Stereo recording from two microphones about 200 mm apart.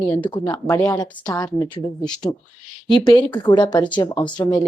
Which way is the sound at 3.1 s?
20° left (ahead or behind).